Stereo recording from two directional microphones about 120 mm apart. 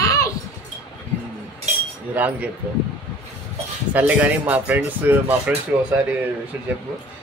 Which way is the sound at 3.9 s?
10° right (ahead or behind).